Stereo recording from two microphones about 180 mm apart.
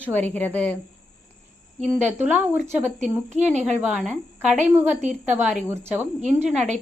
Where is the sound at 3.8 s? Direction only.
Centre (ahead or behind).